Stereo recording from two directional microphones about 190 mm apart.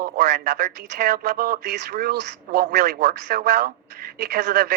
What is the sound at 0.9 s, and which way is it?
Speech, 55° right (ahead or behind).